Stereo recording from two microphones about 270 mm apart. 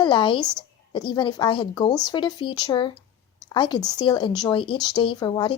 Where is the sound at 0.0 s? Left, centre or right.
Centre.